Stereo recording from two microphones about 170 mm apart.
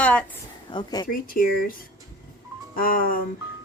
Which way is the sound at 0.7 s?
25° left (ahead or behind).